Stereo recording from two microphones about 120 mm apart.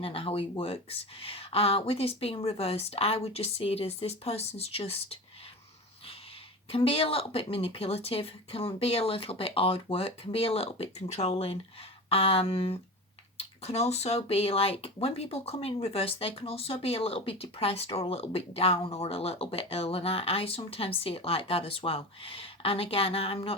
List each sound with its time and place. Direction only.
0.0 s speech: 50° left (ahead or behind)
6.7 s speech: 50° left (ahead or behind)